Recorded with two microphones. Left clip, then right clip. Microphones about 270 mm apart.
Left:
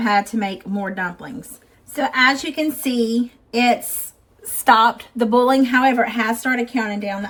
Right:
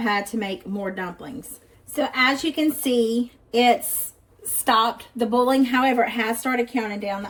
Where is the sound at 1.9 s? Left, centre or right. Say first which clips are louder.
Left 4 dB; left.